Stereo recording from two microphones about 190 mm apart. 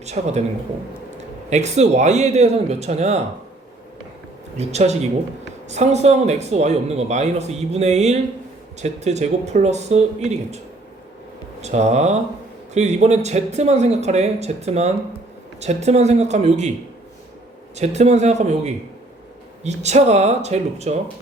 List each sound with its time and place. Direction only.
0.0 s speech: 35° right (ahead or behind)
1.5 s speech: 35° right (ahead or behind)
4.5 s speech: 35° right (ahead or behind)
11.6 s speech: 35° right (ahead or behind)
17.7 s speech: 35° right (ahead or behind)